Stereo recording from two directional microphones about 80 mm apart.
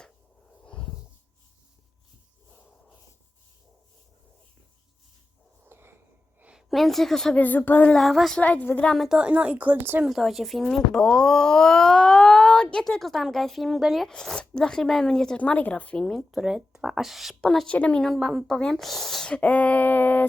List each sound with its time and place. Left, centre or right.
5.6 s a sound: right
6.4 s a woman's voice: centre
7.3 s speech: left
7.9 s speech: centre
8.4 s speech: centre
8.9 s speech: centre
9.1 s speech: centre
10.0 s speech: centre
14.1 s speech: centre
15.4 s speech: centre
17.7 s speech: centre
18.0 s speech: centre; by 20.2 s left